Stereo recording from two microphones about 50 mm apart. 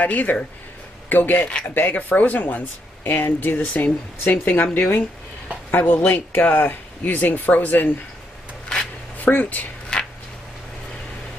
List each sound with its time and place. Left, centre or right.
0.0 s speech: left
9.2 s speech: left
9.9 s a sound: centre